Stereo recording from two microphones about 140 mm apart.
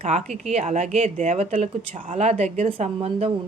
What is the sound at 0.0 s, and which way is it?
Speech, 55° right (ahead or behind).